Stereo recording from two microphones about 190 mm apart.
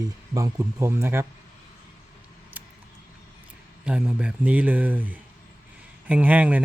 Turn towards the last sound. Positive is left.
turn(degrees=-10)  # may be behind; listen again after turning